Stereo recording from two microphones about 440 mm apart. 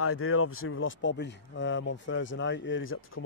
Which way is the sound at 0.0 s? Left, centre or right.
Left.